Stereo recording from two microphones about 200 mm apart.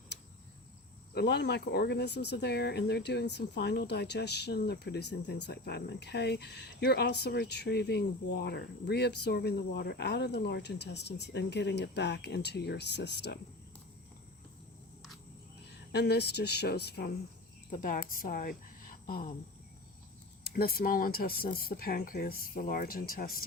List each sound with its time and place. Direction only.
1.1 s speech: 55° left (ahead or behind)
15.9 s speech: 55° left (ahead or behind)
17.7 s speech: 40° left (ahead or behind)
20.4 s speech: 50° left (ahead or behind)